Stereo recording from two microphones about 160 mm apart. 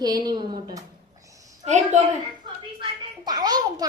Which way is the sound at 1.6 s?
45° right (ahead or behind).